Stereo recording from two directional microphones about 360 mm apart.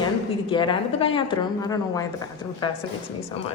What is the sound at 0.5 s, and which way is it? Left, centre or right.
A woman's voice, centre.